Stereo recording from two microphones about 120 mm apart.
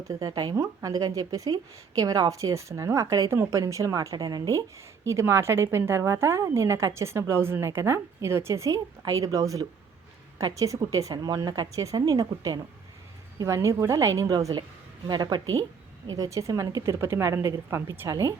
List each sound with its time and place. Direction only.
0.1 s a woman's voice: 30° right (ahead or behind)